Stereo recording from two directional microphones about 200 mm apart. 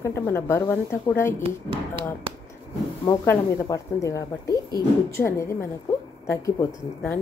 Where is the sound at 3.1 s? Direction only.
15° left (ahead or behind).